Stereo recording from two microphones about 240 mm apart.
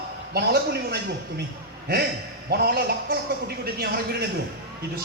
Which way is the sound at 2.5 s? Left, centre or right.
Right.